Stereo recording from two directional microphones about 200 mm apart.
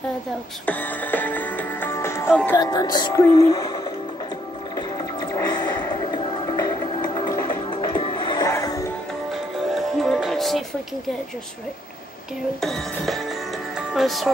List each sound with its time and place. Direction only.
0.7 s music: 10° left (ahead or behind)
2.5 s speech: 20° left (ahead or behind)
4.7 s music: 20° left (ahead or behind)
9.3 s music: centre (ahead or behind)
12.5 s speech: centre (ahead or behind)